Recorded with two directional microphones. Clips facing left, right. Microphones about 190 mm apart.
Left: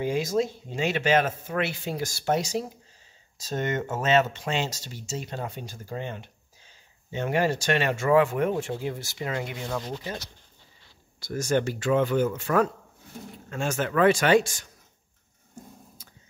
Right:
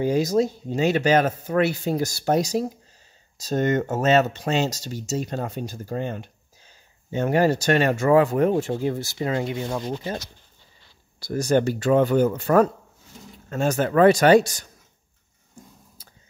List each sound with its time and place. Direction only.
0.0 s speech: 40° right (ahead or behind); by 10.0 s 20° right (ahead or behind)
11.1 s speech: 35° right (ahead or behind)